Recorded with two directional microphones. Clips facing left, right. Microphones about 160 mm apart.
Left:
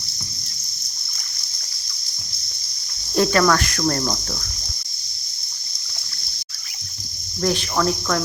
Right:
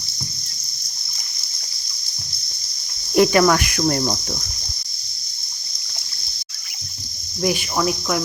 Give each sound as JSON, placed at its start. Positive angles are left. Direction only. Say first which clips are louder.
{"t": 3.2, "sound": "cricket", "louder": "right 3 dB", "side_deg": -15}
{"t": 7.4, "sound": "cricket", "louder": "even", "side_deg": -10}